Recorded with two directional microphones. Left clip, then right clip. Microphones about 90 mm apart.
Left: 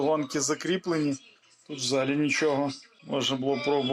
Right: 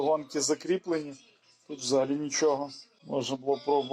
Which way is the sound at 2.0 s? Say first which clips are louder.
Left 2 dB; 35° left (ahead or behind).